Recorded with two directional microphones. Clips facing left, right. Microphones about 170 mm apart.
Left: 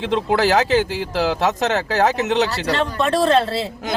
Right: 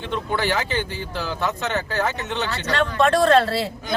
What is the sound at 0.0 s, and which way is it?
Speech, 90° left.